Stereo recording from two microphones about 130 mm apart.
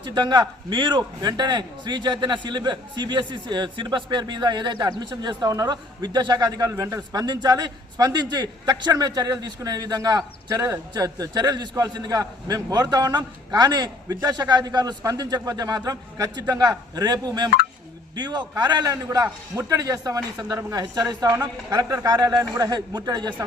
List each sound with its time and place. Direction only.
0.0 s a man's voice: 35° right (ahead or behind)
21.2 s a man's voice: 15° right (ahead or behind)
21.7 s a man's voice: 25° right (ahead or behind)